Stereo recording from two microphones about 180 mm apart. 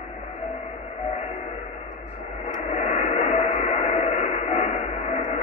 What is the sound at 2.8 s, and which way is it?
Radio, 40° left (ahead or behind).